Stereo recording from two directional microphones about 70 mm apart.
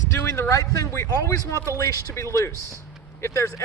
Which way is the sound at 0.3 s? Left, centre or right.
Left.